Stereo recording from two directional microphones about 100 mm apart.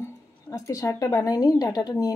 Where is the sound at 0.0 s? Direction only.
35° left (ahead or behind).